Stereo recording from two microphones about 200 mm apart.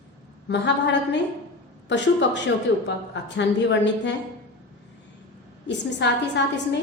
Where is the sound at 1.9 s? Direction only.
60° left (ahead or behind).